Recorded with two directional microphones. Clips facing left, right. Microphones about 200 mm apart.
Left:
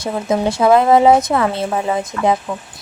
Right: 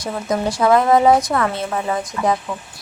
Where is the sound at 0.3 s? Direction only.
25° left (ahead or behind).